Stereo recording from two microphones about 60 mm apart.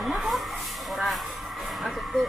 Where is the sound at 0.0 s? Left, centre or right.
Centre.